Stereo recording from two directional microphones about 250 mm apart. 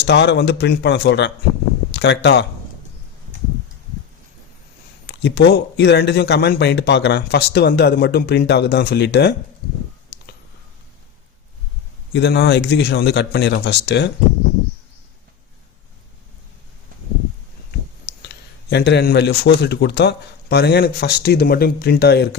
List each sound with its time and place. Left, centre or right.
0.0 s a man's voice: left
5.0 s speech: left
12.1 s a man's voice: left
18.7 s speech: left